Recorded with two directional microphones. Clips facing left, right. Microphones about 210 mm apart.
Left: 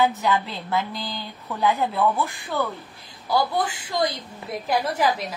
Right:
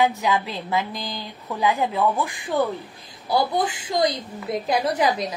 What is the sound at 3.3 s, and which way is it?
A woman's voice, 20° right (ahead or behind).